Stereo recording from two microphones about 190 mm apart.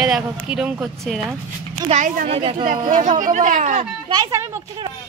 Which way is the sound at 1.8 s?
40° right (ahead or behind).